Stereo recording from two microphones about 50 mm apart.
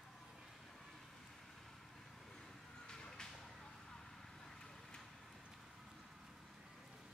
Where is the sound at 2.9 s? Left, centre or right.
Centre.